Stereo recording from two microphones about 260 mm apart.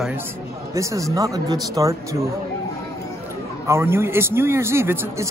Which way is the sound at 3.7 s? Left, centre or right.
Centre.